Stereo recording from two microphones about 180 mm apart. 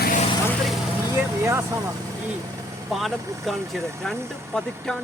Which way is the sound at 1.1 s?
15° right (ahead or behind).